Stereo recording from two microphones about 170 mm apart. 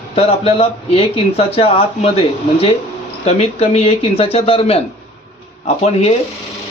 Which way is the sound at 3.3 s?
35° left (ahead or behind).